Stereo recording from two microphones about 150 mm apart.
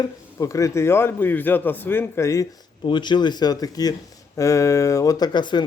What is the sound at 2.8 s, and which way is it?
Speech, 30° left (ahead or behind).